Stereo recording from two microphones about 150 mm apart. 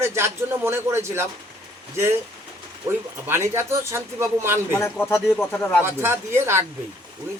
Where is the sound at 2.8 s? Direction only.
15° right (ahead or behind).